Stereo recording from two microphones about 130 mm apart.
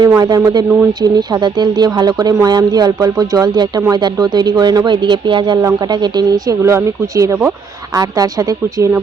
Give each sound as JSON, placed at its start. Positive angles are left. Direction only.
{"t": 0.1, "sound": "speech", "side_deg": -25}